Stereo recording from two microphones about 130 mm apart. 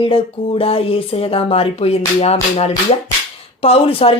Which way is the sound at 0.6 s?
45° left (ahead or behind).